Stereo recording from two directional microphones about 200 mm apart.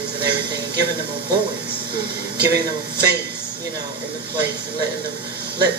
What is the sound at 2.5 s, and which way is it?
Speech, 15° right (ahead or behind).